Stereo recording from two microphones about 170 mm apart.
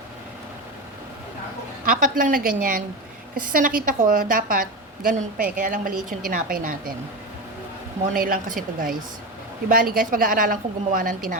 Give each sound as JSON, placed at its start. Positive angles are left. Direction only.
{"t": 1.8, "sound": "a woman's voice", "side_deg": -50}
{"t": 8.1, "sound": "a woman's voice", "side_deg": -55}